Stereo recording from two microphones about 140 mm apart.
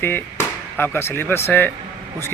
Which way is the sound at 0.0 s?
15° left (ahead or behind).